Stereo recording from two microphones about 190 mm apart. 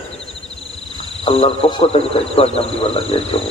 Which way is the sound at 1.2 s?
30° left (ahead or behind).